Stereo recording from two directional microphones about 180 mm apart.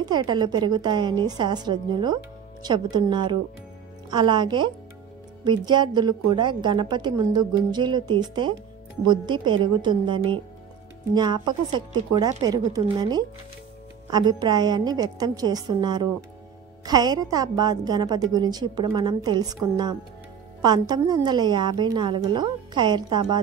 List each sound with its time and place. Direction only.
0.0 s a woman's voice: 25° right (ahead or behind)